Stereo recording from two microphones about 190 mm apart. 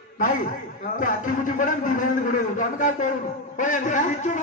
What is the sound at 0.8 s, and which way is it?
A man's voice, 45° left (ahead or behind).